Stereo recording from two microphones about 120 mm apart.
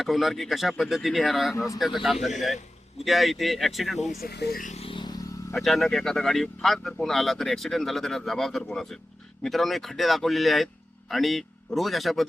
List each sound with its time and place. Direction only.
0.0 s speech: centre (ahead or behind)
1.5 s speech: 25° left (ahead or behind)
1.8 s speech: centre (ahead or behind)
4.6 s vehicle: 70° left (ahead or behind)
4.9 s vehicle: 40° left (ahead or behind)
5.5 s speech: centre (ahead or behind)